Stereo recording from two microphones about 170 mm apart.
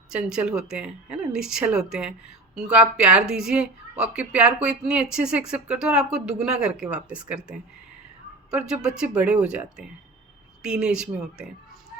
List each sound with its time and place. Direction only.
0.1 s a woman's voice: 5° right (ahead or behind)